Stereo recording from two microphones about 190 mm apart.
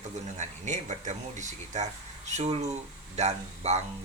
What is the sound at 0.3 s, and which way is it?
Speech, 40° right (ahead or behind).